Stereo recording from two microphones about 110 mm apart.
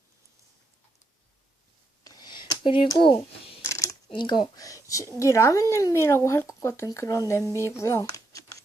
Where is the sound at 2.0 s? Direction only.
40° left (ahead or behind).